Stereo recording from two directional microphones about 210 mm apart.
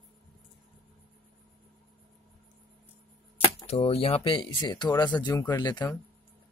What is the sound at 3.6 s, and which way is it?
Speech, 30° left (ahead or behind).